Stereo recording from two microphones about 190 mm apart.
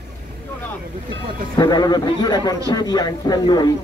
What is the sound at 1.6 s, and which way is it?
A man's voice, 20° left (ahead or behind).